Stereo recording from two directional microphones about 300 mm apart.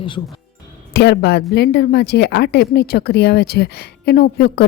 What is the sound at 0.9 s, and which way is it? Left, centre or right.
Speech, left.